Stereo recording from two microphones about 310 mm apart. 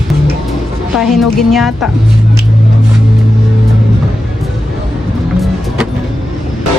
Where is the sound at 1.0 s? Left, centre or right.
Centre.